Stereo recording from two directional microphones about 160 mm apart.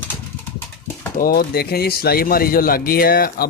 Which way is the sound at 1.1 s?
70° left (ahead or behind).